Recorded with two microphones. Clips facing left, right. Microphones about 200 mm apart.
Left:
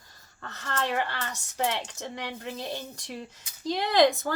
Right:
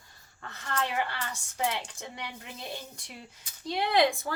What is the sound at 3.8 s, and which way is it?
Speech, 40° left (ahead or behind).